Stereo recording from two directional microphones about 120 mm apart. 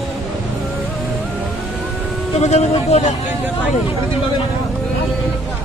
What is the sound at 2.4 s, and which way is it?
Speech, 65° left (ahead or behind).